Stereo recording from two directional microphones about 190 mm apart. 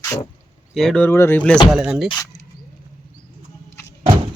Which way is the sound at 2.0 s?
20° left (ahead or behind).